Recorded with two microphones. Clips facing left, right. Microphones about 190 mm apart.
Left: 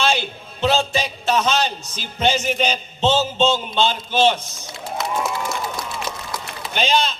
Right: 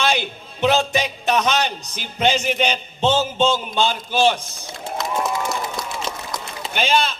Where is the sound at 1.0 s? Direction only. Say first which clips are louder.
Even; 15° right (ahead or behind).